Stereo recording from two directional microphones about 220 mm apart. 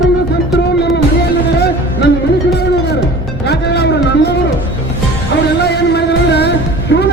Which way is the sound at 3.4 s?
50° left (ahead or behind).